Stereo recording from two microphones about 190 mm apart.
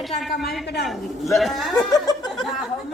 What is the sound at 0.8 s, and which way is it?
Mantra, centre (ahead or behind).